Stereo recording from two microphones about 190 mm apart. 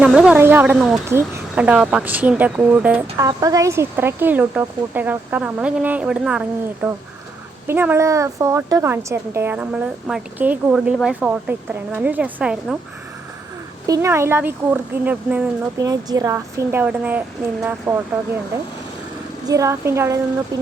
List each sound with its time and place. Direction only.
0.0 s speech: 5° right (ahead or behind)
1.0 s speech: 15° right (ahead or behind)
13.8 s speech: 15° right (ahead or behind)
15.8 s speech: 20° right (ahead or behind)
19.5 s speech: 15° right (ahead or behind)